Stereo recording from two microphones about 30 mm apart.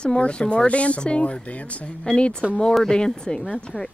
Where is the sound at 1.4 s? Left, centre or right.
Left.